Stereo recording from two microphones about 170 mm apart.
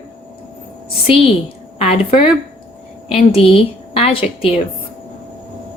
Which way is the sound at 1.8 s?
35° left (ahead or behind).